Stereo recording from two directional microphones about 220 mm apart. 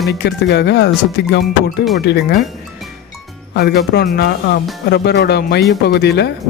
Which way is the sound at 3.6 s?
50° left (ahead or behind).